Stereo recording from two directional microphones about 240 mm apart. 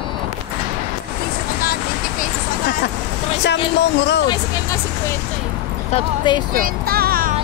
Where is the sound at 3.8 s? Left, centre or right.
Left.